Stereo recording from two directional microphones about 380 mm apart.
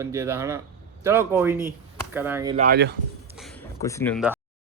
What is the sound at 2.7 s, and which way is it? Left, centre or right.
Speech, right.